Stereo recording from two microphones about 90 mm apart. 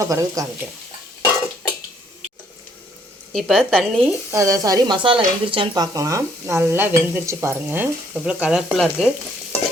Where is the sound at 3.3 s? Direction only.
5° left (ahead or behind).